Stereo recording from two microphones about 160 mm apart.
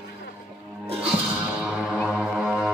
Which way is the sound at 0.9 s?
5° right (ahead or behind).